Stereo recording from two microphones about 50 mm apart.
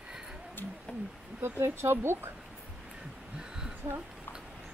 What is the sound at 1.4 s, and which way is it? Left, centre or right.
Speech, right.